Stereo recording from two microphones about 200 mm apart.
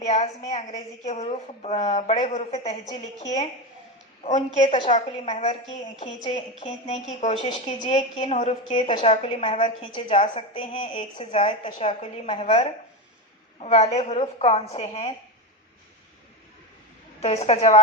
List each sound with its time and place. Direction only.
0.0 s a woman's voice: 35° left (ahead or behind)
4.2 s a woman's voice: 35° left (ahead or behind)
17.2 s a woman's voice: 30° left (ahead or behind)